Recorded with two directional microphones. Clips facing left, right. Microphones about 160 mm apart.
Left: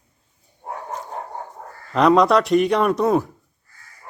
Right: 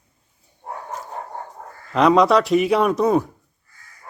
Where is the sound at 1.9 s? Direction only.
Centre (ahead or behind).